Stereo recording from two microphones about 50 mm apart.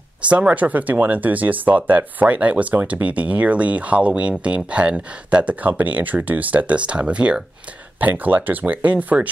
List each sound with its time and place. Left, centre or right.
0.3 s speech: right
8.0 s speech: right